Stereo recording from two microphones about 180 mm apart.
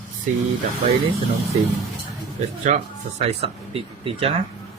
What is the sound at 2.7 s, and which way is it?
Speech, 40° right (ahead or behind).